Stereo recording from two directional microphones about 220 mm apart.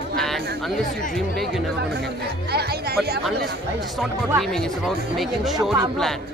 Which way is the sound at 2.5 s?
45° right (ahead or behind).